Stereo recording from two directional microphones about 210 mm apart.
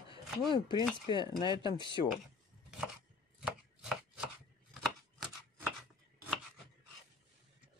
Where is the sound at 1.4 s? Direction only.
20° left (ahead or behind).